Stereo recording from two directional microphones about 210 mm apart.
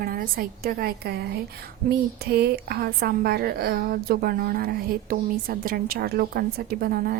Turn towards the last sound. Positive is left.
turn(degrees=-45)  # may be behind; listen again after turning